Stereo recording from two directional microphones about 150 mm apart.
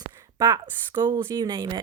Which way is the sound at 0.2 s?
25° right (ahead or behind).